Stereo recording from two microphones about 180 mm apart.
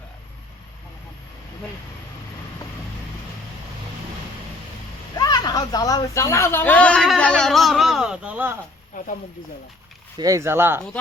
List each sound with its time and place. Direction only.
5.1 s speech: 20° left (ahead or behind); by 8.5 s 10° right (ahead or behind)
8.9 s speech: 50° left (ahead or behind)
10.2 s speech: 20° right (ahead or behind)